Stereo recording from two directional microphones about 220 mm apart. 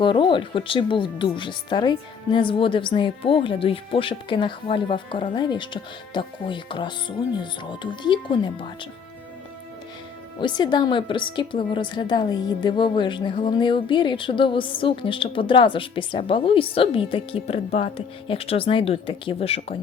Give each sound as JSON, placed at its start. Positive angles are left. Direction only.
{"t": 0.0, "sound": "a woman's voice", "side_deg": 20}
{"t": 10.4, "sound": "a woman's voice", "side_deg": 20}